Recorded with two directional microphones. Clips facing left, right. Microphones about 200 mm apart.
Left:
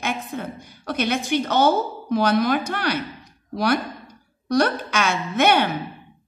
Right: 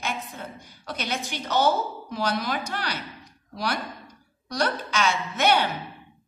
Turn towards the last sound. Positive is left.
turn(degrees=55)  # may be behind; listen again after turning